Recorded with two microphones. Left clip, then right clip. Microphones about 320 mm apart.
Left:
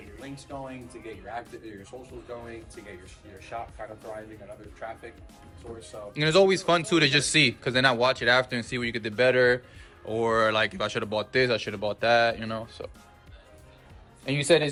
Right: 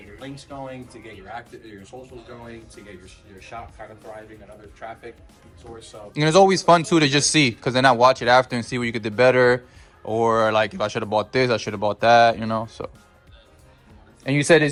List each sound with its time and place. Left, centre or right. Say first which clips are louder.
0.2 s speech: right 3 dB; centre
6.1 s speech: right 5 dB; centre
14.3 s a man's voice: right 6 dB; right